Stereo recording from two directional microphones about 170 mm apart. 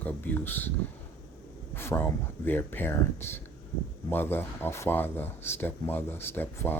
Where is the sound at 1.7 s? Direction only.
15° left (ahead or behind).